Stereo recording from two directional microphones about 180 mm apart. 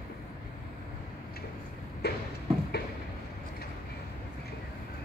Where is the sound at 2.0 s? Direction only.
65° left (ahead or behind).